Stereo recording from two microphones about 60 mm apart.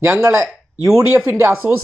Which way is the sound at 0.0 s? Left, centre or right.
Right.